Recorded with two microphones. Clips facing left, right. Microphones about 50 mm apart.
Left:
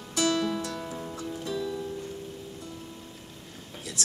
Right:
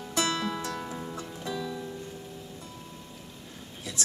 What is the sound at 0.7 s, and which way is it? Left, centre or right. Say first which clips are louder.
Music: even; centre.